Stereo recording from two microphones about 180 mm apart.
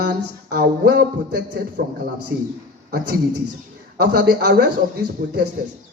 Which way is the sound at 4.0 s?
65° right (ahead or behind).